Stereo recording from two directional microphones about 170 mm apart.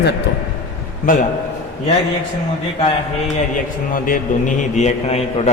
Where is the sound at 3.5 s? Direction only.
50° left (ahead or behind).